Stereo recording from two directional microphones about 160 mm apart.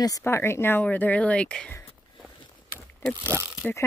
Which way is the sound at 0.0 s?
20° left (ahead or behind).